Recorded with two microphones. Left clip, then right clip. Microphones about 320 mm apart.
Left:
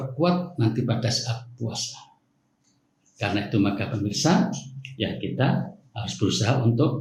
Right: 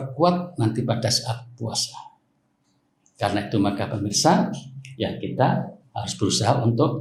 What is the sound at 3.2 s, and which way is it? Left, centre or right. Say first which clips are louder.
A man's voice: right 2 dB; centre.